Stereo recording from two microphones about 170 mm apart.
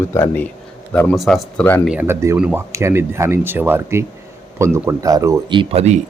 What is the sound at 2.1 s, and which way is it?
Speech, 15° right (ahead or behind).